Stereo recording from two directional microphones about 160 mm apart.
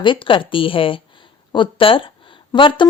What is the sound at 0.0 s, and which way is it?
Speech, 30° left (ahead or behind).